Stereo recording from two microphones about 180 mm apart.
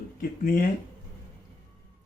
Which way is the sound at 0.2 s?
55° left (ahead or behind).